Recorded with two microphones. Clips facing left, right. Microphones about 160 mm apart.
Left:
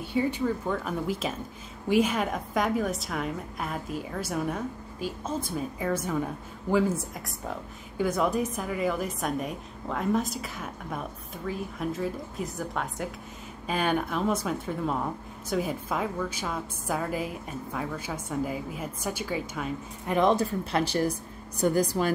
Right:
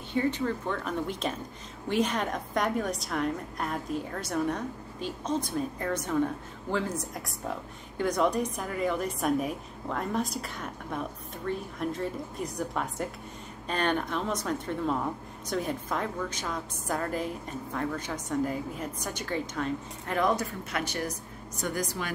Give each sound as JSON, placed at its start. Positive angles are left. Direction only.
{"t": 0.1, "sound": "a woman's voice", "side_deg": 10}
{"t": 7.2, "sound": "a woman's voice", "side_deg": 0}
{"t": 20.2, "sound": "a woman's voice", "side_deg": 25}